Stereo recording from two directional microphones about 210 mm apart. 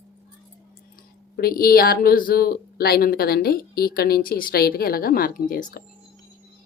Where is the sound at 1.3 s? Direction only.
45° left (ahead or behind).